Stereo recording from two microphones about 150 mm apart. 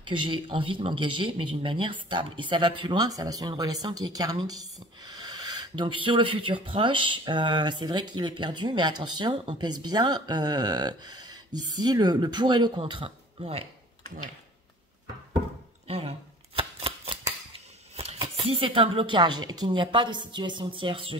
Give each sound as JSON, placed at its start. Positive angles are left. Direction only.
{"t": 0.1, "sound": "speech", "side_deg": -35}
{"t": 15.9, "sound": "a sound", "side_deg": -40}
{"t": 17.9, "sound": "speech", "side_deg": -35}